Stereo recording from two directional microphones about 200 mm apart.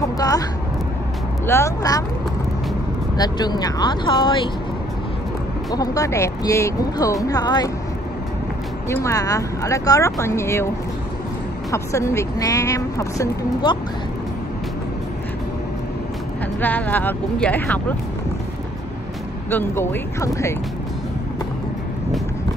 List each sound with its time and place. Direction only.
0.2 s speech: 15° left (ahead or behind)
3.2 s speech: 20° left (ahead or behind)
5.7 s speech: 15° left (ahead or behind)
8.8 s speech: 15° left (ahead or behind)
11.7 s speech: 15° left (ahead or behind)
16.6 s speech: 10° left (ahead or behind)
19.5 s speech: 10° left (ahead or behind)